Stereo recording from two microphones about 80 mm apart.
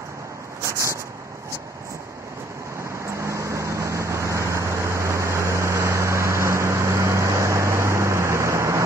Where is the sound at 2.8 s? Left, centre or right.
Right.